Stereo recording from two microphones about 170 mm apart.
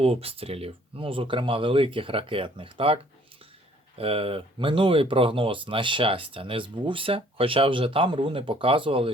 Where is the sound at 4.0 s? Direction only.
35° right (ahead or behind).